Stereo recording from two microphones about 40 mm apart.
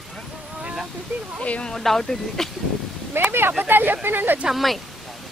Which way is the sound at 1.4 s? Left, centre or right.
Left.